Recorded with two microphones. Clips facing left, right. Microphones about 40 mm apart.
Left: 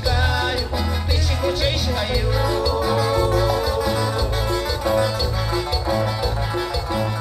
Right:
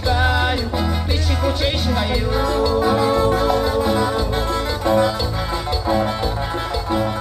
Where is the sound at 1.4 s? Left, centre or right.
Centre.